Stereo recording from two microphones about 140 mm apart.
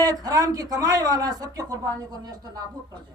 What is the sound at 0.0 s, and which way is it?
Speech, 25° right (ahead or behind).